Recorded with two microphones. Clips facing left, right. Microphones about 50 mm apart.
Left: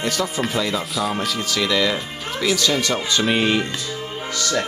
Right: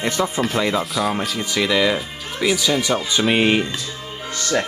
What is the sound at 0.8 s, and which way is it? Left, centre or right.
Speech, centre.